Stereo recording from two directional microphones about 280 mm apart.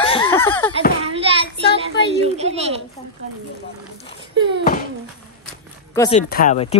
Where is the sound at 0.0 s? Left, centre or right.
Centre.